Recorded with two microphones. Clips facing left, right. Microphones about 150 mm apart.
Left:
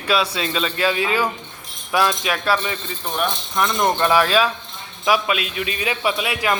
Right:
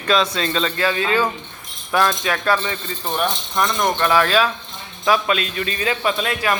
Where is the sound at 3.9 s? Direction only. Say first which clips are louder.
Right 1 dB; 15° left (ahead or behind).